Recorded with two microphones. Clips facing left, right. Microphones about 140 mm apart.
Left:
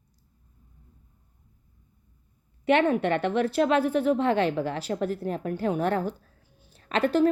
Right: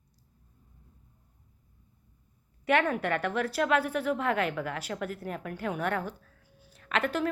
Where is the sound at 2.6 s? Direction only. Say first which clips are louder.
Left 5 dB; 25° left (ahead or behind).